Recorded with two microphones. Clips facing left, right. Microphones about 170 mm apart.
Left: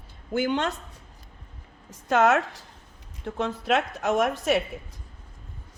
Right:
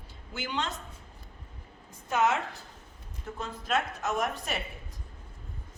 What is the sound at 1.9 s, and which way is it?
Speech, 90° left.